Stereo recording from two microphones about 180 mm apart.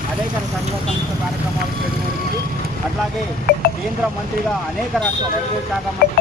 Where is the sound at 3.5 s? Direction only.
60° left (ahead or behind).